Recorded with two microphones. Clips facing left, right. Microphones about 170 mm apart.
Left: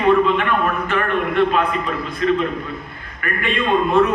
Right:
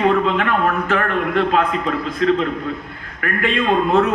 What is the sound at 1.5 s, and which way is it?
A man's voice, 90° right.